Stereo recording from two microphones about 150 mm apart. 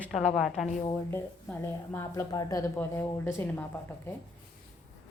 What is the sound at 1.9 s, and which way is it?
A woman's voice, 20° left (ahead or behind).